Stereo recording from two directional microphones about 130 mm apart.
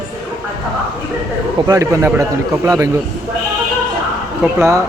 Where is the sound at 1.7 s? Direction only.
20° right (ahead or behind).